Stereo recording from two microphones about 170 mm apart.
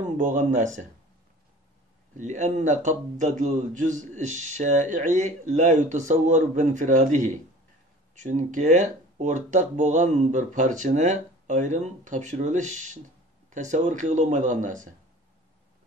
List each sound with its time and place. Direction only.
0.2 s a man's voice: 45° right (ahead or behind)
2.1 s a man's voice: 45° right (ahead or behind)